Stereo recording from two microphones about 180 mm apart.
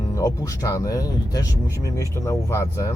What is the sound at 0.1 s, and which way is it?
Speech, 20° left (ahead or behind).